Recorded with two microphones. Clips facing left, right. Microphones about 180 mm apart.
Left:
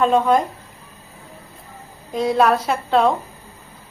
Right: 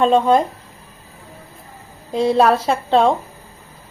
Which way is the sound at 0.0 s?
30° right (ahead or behind).